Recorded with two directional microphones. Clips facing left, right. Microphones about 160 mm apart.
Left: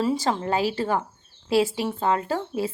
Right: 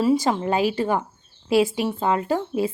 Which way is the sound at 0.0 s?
10° right (ahead or behind).